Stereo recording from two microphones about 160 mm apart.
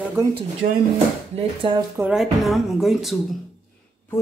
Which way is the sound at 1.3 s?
35° right (ahead or behind).